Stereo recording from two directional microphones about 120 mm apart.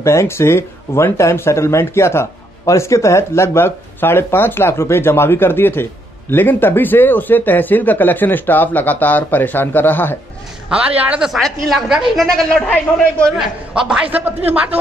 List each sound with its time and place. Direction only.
0.0 s speech: 25° left (ahead or behind)
10.7 s a woman's voice: 10° right (ahead or behind); by 13.3 s 10° left (ahead or behind)
13.4 s a woman's voice: 5° right (ahead or behind)